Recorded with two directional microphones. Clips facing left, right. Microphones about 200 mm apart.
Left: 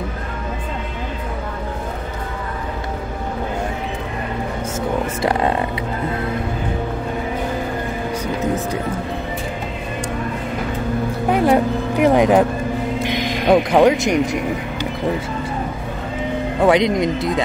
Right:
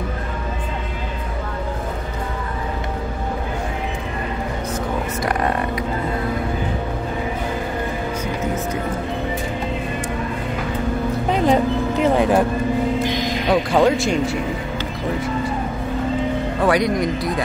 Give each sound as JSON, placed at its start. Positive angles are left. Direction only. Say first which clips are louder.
{"t": 5.2, "sound": "a sound", "louder": "left 3 dB", "side_deg": 30}
{"t": 11.3, "sound": "music", "louder": "left 2 dB", "side_deg": 10}
{"t": 13.7, "sound": "speech", "louder": "left 3 dB", "side_deg": 20}
{"t": 16.6, "sound": "speech", "louder": "left 3 dB", "side_deg": 20}